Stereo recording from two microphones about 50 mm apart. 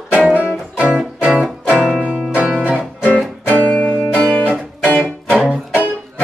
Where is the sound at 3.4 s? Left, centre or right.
Left.